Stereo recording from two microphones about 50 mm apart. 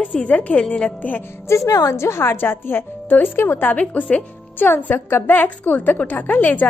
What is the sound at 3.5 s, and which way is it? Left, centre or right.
Speech, left.